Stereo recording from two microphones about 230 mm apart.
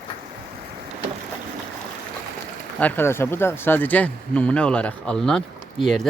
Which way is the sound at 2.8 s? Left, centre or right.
Centre.